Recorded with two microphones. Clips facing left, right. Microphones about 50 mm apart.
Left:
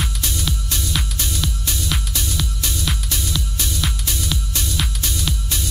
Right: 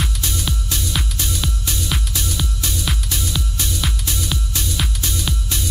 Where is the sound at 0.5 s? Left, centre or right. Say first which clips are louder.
Even; centre.